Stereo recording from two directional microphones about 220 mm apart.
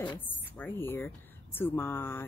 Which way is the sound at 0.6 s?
10° left (ahead or behind).